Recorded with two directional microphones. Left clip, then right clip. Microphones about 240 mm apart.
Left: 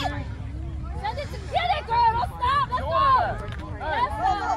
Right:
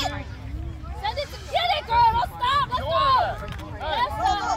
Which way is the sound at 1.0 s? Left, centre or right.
Right.